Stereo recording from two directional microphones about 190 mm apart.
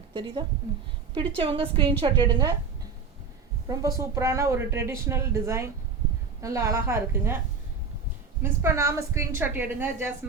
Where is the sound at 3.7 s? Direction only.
15° right (ahead or behind).